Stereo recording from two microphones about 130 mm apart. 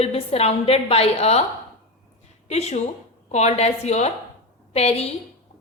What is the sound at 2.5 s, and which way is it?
A woman's voice, 55° left (ahead or behind).